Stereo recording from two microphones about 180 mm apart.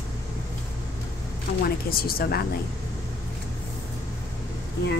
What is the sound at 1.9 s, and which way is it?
Speech, 55° left (ahead or behind).